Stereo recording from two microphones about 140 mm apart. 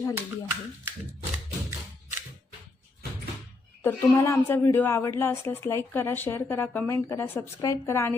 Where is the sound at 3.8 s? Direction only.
20° left (ahead or behind).